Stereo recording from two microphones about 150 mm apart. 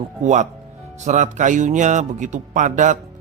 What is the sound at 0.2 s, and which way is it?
A man's voice, 50° right (ahead or behind).